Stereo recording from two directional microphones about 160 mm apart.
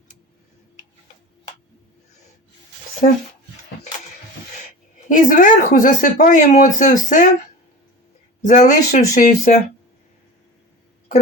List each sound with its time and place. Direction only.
3.0 s speech: 40° left (ahead or behind)
4.9 s speech: 55° left (ahead or behind)
8.4 s speech: 50° left (ahead or behind)